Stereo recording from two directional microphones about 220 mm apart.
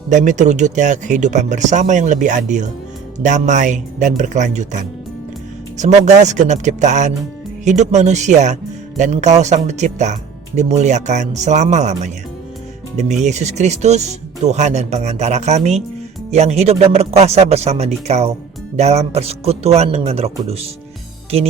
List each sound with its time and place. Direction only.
0.1 s speech: 35° right (ahead or behind)
13.2 s speech: 30° right (ahead or behind)